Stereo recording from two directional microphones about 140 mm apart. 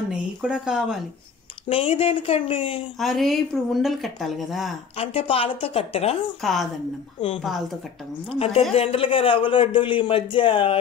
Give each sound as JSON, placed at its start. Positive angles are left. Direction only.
{"t": 0.1, "sound": "speech", "side_deg": -5}
{"t": 1.7, "sound": "a woman's voice", "side_deg": 45}
{"t": 3.0, "sound": "speech", "side_deg": 0}
{"t": 4.9, "sound": "a woman's voice", "side_deg": 45}
{"t": 6.4, "sound": "speech", "side_deg": 0}
{"t": 8.3, "sound": "a woman's voice", "side_deg": 45}